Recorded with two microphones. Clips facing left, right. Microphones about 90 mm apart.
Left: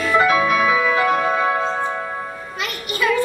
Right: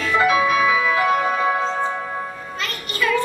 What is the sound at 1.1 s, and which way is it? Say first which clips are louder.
Music: left 1 dB; 15° left (ahead or behind).